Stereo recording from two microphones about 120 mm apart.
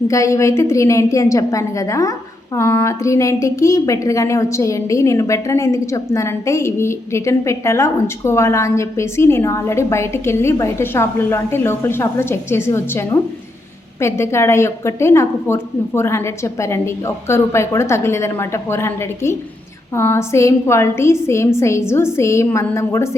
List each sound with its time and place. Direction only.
0.1 s a woman's voice: 25° left (ahead or behind)